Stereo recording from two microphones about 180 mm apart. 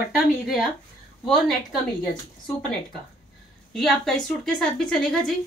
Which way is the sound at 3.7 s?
Centre (ahead or behind).